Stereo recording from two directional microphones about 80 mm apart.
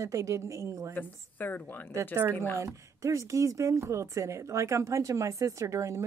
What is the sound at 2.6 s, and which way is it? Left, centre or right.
Speech, right.